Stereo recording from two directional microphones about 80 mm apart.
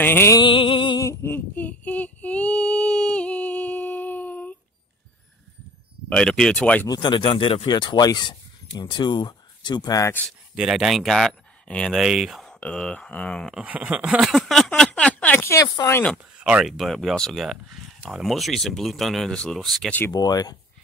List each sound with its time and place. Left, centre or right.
0.0 s music: left
0.4 s music: left
1.0 s female singing: left
6.0 s speech: centre
7.0 s speech: left
10.5 s speech: centre
12.0 s speech: centre
12.4 s speech: centre
13.6 s speech: centre
14.2 s a sound: centre
15.6 s speech: left
16.3 s a sound: centre
16.6 s speech: centre
20.1 s speech: left